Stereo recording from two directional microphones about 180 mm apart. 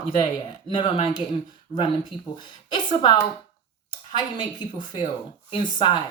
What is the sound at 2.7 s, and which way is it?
A woman's voice, 25° left (ahead or behind).